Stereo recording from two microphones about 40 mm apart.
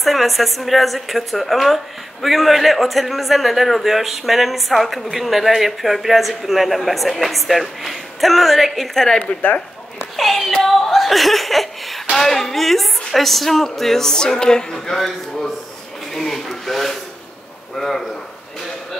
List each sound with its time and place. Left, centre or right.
0.0 s a man's voice: centre
10.1 s a man's voice: centre
15.0 s a man's voice: centre